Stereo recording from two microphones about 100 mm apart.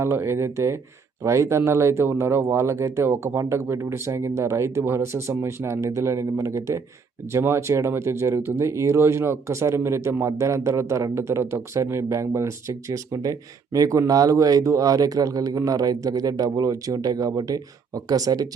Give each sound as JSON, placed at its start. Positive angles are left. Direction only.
{"t": 0.0, "sound": "speech", "side_deg": -25}